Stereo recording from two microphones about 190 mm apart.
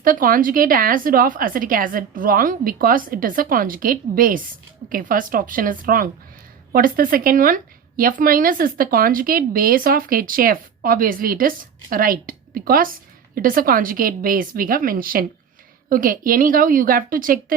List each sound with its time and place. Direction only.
0.0 s speech: 45° right (ahead or behind)